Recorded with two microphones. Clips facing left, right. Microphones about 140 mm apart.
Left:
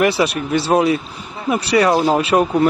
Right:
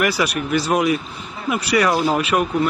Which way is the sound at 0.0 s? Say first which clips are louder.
Left 4 dB; 30° left (ahead or behind).